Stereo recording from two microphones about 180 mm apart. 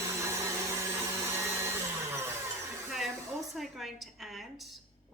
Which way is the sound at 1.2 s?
15° right (ahead or behind).